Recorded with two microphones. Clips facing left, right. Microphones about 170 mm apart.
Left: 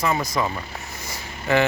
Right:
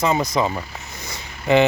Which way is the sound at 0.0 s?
20° right (ahead or behind).